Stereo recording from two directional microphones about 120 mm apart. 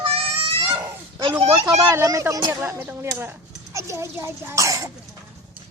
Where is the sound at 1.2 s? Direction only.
45° right (ahead or behind).